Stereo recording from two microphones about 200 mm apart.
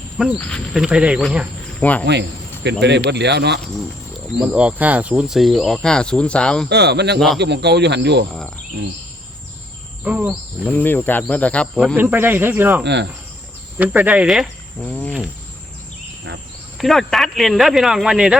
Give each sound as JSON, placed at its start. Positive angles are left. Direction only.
{"t": 0.2, "sound": "speech", "side_deg": 5}
{"t": 1.8, "sound": "speech", "side_deg": 5}
{"t": 2.6, "sound": "speech", "side_deg": -60}
{"t": 4.4, "sound": "speech", "side_deg": -5}
{"t": 6.7, "sound": "speech", "side_deg": -55}
{"t": 10.0, "sound": "speech", "side_deg": -5}
{"t": 10.6, "sound": "speech", "side_deg": 5}
{"t": 11.9, "sound": "speech", "side_deg": -10}
{"t": 12.8, "sound": "speech", "side_deg": -60}
{"t": 13.7, "sound": "speech", "side_deg": -10}
{"t": 16.7, "sound": "speech", "side_deg": 0}